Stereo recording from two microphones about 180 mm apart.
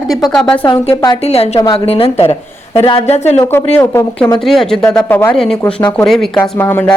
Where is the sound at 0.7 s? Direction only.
25° left (ahead or behind).